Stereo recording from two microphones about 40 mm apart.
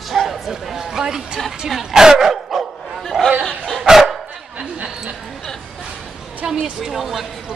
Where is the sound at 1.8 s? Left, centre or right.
Centre.